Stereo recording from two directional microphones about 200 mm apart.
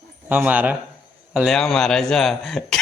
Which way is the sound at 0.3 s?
10° right (ahead or behind).